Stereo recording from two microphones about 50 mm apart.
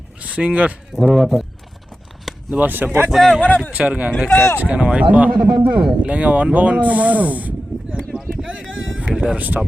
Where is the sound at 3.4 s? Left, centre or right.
Left.